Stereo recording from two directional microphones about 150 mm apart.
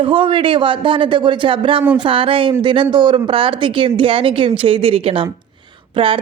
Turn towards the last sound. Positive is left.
turn(degrees=-35)  # may be behind; listen again after turning